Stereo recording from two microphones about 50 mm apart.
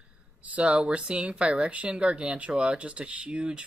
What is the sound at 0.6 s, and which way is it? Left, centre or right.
Speech, right.